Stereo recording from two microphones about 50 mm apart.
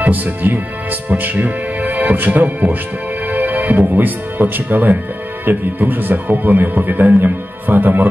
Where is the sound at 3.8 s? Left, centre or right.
Right.